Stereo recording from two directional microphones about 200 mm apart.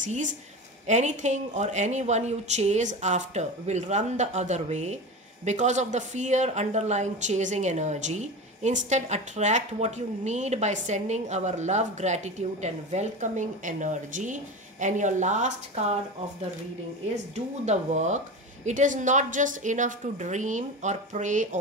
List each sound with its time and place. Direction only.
0.0 s speech: 40° right (ahead or behind)
17.6 s speech: 35° right (ahead or behind)